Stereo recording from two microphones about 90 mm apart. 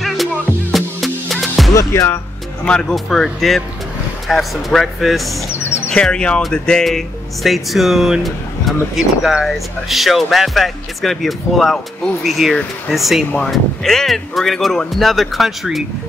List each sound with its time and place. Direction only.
0.7 s music: centre (ahead or behind)
1.7 s speech: 35° left (ahead or behind)
2.6 s speech: 10° left (ahead or behind)
5.5 s bird: 25° left (ahead or behind)
5.9 s speech: 10° left (ahead or behind)